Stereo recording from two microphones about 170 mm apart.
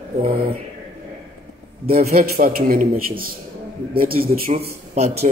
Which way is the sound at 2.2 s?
60° right (ahead or behind).